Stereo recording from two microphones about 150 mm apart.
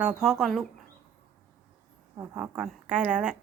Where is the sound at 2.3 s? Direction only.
5° right (ahead or behind).